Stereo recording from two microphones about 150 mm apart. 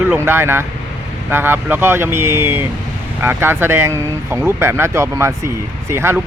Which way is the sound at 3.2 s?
15° right (ahead or behind).